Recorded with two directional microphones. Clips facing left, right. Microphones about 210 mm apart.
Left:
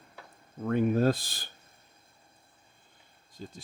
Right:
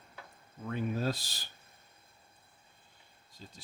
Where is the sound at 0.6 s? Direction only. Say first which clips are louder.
Left 9 dB; 55° left (ahead or behind).